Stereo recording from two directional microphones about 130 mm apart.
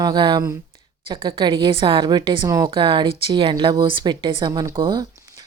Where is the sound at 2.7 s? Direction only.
40° right (ahead or behind).